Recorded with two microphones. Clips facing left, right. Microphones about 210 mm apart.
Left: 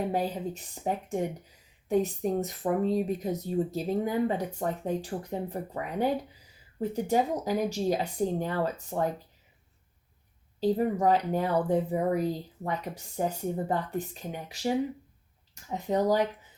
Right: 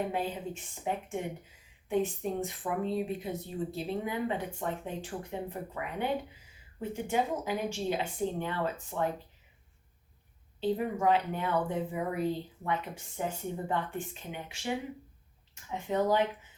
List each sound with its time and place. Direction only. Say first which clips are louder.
0.1 s speech: left 4 dB; 40° left (ahead or behind)
10.6 s speech: left 4 dB; 40° left (ahead or behind)
15.7 s speech: left 3 dB; 40° left (ahead or behind)